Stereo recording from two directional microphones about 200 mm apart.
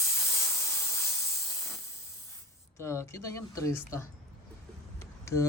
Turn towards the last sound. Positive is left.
turn(degrees=15)  # may be behind; listen again after turning